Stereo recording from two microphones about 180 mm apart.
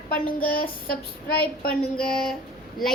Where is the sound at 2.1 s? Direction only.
Centre (ahead or behind).